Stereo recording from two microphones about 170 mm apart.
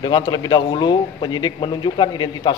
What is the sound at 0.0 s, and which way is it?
A man's voice, 25° left (ahead or behind).